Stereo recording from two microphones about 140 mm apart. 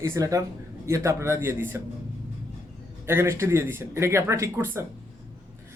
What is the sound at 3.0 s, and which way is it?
Speech, 20° right (ahead or behind).